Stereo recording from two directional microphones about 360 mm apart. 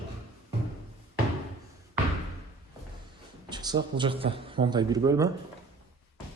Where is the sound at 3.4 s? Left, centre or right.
Centre.